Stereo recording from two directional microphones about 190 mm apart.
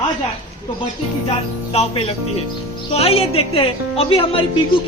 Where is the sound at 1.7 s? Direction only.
30° left (ahead or behind).